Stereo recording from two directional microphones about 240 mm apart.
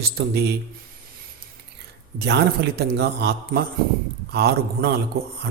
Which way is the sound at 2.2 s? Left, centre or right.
Right.